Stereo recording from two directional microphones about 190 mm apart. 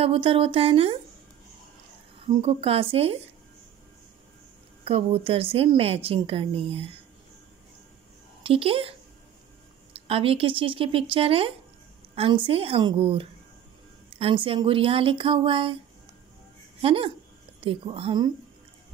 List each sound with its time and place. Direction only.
0.0 s a woman's voice: 30° right (ahead or behind)
2.2 s a woman's voice: 30° right (ahead or behind)
4.8 s a woman's voice: 30° right (ahead or behind)
8.4 s a woman's voice: 30° right (ahead or behind)
10.0 s a woman's voice: 30° right (ahead or behind)
16.8 s a woman's voice: 30° right (ahead or behind)